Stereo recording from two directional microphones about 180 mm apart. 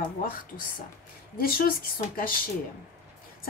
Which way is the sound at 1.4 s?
55° left (ahead or behind).